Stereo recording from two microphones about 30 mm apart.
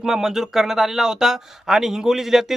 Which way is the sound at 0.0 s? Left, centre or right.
Centre.